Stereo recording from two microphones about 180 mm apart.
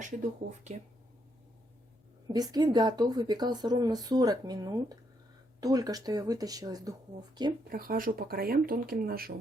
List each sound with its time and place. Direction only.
0.0 s speech: 40° right (ahead or behind)
2.3 s speech: 20° right (ahead or behind)
7.7 s speech: 55° right (ahead or behind)